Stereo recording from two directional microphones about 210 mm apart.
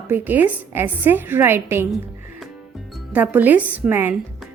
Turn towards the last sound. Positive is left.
turn(degrees=-10)  # may be behind; listen again after turning